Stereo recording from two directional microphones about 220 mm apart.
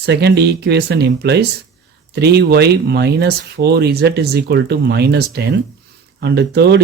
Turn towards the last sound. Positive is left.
turn(degrees=-50)  # may be behind; listen again after turning